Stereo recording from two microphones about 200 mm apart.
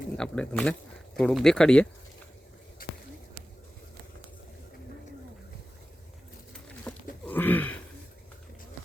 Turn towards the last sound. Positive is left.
turn(degrees=10)  # may be behind; listen again after turning